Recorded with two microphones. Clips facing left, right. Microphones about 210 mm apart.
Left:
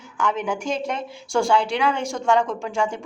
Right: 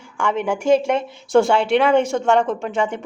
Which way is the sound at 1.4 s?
25° right (ahead or behind).